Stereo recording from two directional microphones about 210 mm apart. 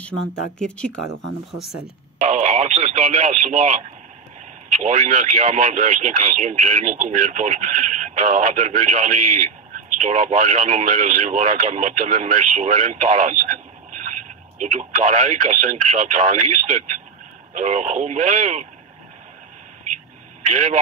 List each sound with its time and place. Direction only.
0.6 s speech: 5° left (ahead or behind)
2.2 s speech: 35° right (ahead or behind)
20.5 s speech: 35° right (ahead or behind)